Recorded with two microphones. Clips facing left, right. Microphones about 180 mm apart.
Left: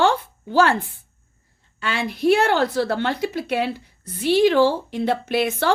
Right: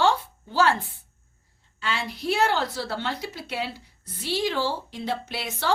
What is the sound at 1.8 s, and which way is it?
A woman's voice, 55° left (ahead or behind).